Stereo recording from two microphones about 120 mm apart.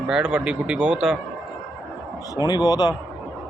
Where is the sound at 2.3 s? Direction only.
35° left (ahead or behind).